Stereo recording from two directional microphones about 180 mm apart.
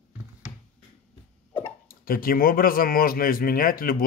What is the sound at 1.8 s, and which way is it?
Speech, 55° left (ahead or behind).